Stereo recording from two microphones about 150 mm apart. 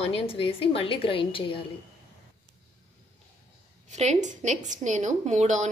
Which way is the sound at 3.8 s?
50° right (ahead or behind).